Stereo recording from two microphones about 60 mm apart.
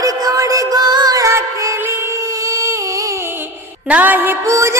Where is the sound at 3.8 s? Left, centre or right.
Right.